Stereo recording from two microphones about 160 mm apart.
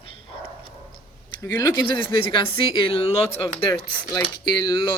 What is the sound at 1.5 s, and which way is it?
Speech, 20° left (ahead or behind).